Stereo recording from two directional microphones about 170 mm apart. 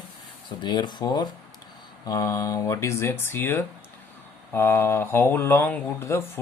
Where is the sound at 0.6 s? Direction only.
25° left (ahead or behind).